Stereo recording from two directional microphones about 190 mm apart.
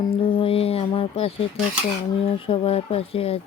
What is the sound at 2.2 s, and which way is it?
Speech, 30° left (ahead or behind).